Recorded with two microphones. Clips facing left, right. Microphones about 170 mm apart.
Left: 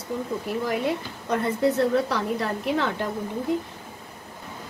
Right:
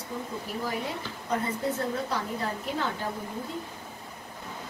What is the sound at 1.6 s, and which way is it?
A woman's voice, 75° left (ahead or behind).